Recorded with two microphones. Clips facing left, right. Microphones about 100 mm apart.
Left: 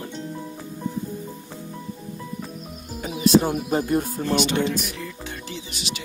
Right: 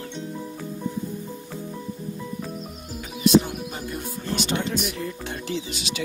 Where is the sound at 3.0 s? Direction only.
40° left (ahead or behind).